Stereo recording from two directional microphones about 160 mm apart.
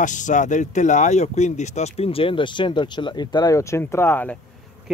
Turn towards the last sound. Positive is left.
turn(degrees=15)  # may be behind; listen again after turning